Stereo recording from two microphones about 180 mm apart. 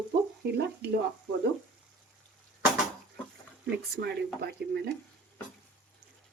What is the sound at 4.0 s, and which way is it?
Speech, 65° right (ahead or behind).